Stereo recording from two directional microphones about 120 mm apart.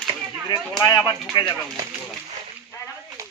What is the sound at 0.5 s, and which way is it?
Speech, 35° left (ahead or behind).